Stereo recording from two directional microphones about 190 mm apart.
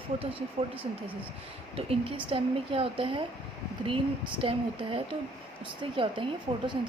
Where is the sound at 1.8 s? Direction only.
30° right (ahead or behind).